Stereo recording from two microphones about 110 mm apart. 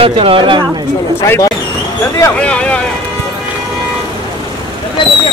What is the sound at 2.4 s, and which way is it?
Speech, 10° left (ahead or behind).